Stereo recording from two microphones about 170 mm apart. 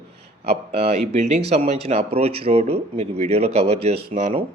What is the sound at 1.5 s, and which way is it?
A man's voice, 35° right (ahead or behind).